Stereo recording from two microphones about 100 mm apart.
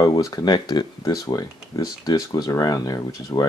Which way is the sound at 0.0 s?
35° left (ahead or behind).